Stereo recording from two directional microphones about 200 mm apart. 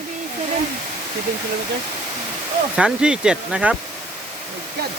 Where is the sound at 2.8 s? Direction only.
5° right (ahead or behind).